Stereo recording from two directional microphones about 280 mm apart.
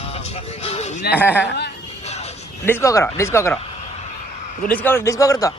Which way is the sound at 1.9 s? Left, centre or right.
Left.